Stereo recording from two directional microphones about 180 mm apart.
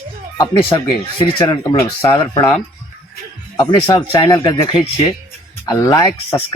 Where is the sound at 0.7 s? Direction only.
25° left (ahead or behind).